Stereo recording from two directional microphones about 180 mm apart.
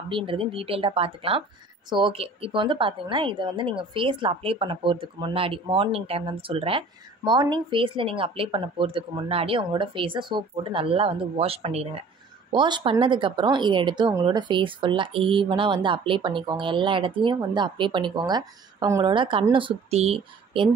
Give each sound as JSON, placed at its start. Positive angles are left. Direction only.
{"t": 0.1, "sound": "speech", "side_deg": -30}